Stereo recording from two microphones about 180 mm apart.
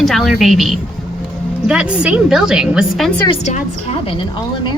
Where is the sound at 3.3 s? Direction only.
40° left (ahead or behind).